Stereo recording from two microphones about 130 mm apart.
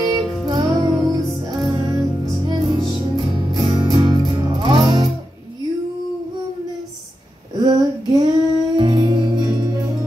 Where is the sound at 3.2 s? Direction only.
40° right (ahead or behind).